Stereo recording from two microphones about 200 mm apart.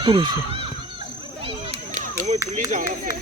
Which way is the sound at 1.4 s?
30° right (ahead or behind).